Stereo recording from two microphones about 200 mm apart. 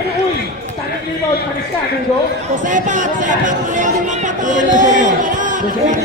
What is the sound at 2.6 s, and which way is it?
Speech, 40° right (ahead or behind).